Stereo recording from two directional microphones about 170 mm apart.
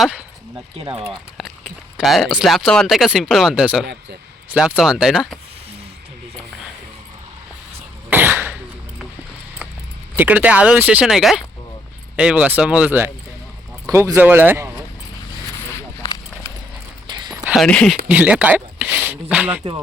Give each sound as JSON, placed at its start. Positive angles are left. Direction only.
{"t": 0.8, "sound": "speech", "side_deg": -35}
{"t": 1.4, "sound": "speech", "side_deg": 0}
{"t": 8.1, "sound": "cough", "side_deg": -10}
{"t": 10.2, "sound": "speech", "side_deg": -10}
{"t": 17.1, "sound": "a sound", "side_deg": -25}
{"t": 17.4, "sound": "a sound", "side_deg": -5}
{"t": 17.7, "sound": "speech", "side_deg": 5}
{"t": 18.1, "sound": "speech", "side_deg": -10}